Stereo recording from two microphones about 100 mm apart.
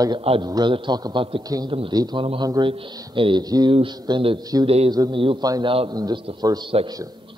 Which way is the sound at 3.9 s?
45° right (ahead or behind).